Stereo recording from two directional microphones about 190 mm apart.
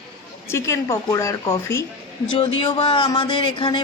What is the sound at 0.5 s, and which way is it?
Speech, 15° left (ahead or behind).